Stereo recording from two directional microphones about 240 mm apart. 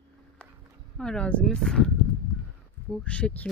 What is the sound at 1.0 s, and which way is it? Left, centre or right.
Speech, centre.